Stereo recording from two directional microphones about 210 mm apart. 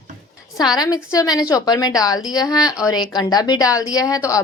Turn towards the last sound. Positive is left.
turn(degrees=15)  # may be behind; listen again after turning